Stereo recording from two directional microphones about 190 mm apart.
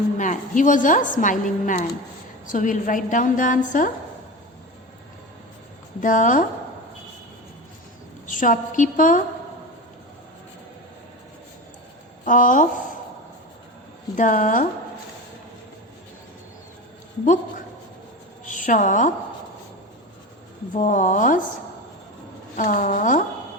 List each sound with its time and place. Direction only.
0.2 s a woman's voice: 40° left (ahead or behind)
6.0 s a woman's voice: 45° left (ahead or behind)
8.3 s a woman's voice: 45° left (ahead or behind)
12.2 s speech: 45° left (ahead or behind)
14.2 s a woman's voice: 45° left (ahead or behind)
18.4 s a woman's voice: 45° left (ahead or behind)
20.7 s a woman's voice: 40° left (ahead or behind)
22.5 s a woman's voice: 45° left (ahead or behind)